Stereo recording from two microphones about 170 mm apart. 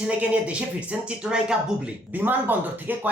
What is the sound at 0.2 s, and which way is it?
Speech, 10° right (ahead or behind).